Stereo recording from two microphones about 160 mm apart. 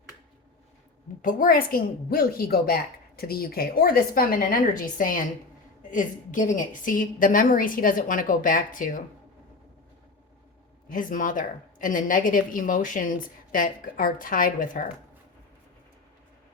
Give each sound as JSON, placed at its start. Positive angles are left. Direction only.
{"t": 1.2, "sound": "a woman's voice", "side_deg": 60}
{"t": 10.8, "sound": "speech", "side_deg": 60}